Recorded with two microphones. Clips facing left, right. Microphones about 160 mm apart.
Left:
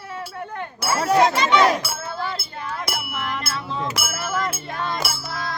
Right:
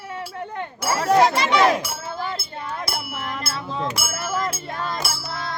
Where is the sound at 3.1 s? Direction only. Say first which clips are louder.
Left 1 dB; 30° right (ahead or behind).